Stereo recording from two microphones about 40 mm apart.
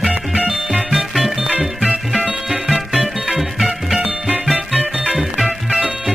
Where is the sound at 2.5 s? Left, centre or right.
Centre.